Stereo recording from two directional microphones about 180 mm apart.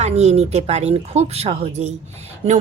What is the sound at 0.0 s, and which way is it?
A woman's voice, 40° right (ahead or behind).